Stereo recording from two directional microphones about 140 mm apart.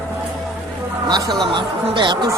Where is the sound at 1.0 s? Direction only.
30° right (ahead or behind).